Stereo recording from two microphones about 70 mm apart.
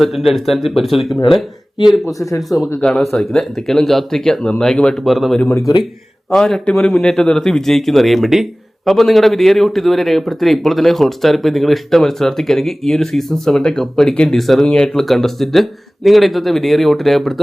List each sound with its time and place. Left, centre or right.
0.0 s speech: centre
2.1 s speech: left
2.8 s speech: centre